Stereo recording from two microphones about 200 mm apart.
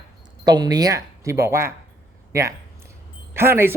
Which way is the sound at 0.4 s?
20° right (ahead or behind).